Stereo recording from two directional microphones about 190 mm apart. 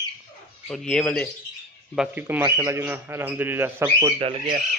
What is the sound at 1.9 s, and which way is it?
Speech, 5° right (ahead or behind).